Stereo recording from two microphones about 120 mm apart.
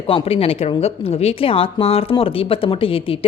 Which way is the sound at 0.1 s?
55° left (ahead or behind).